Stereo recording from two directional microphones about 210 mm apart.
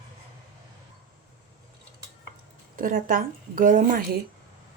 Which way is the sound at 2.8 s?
40° right (ahead or behind).